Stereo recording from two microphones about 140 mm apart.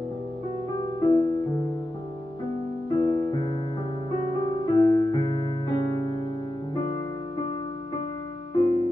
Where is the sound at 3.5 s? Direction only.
40° left (ahead or behind).